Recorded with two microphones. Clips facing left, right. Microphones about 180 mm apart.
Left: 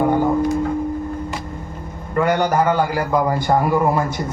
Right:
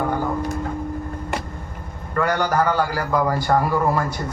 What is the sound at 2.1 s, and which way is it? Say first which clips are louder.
A man's voice: left 3 dB; 20° left (ahead or behind).